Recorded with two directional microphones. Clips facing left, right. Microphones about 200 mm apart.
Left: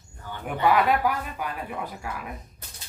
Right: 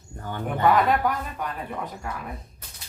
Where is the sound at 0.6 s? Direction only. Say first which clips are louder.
Right 1 dB; 5° left (ahead or behind).